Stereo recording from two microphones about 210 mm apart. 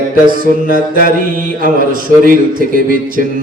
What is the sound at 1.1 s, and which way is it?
Speech, 40° right (ahead or behind).